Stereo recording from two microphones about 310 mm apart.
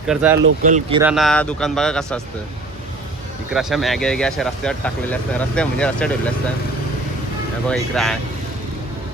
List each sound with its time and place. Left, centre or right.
0.1 s speech: centre
0.6 s speech: centre
1.0 s speech: centre
3.5 s speech: centre
7.7 s speech: centre